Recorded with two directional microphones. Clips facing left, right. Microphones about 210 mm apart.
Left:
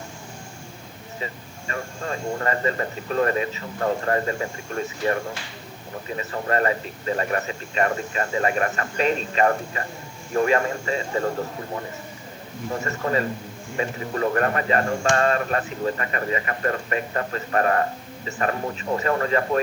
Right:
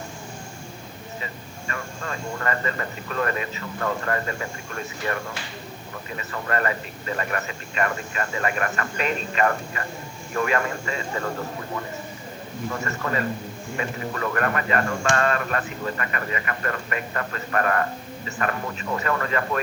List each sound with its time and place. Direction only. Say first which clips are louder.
1.2 s speech: left 2 dB; 30° left (ahead or behind)
12.7 s speech: left 4 dB; 30° left (ahead or behind)